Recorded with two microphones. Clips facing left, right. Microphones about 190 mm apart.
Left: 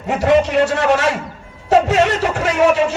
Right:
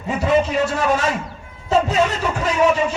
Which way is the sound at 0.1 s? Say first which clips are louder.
Left 4 dB; 75° left (ahead or behind).